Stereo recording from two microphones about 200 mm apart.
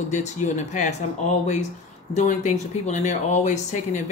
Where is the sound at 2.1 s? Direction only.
35° left (ahead or behind).